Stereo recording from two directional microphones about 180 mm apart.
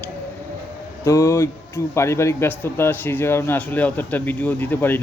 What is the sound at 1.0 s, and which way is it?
Speech, 15° left (ahead or behind).